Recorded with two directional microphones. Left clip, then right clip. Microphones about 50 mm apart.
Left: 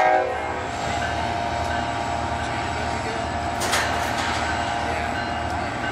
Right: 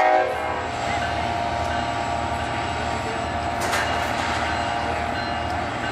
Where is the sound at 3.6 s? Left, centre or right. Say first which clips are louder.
Left 1 dB; left.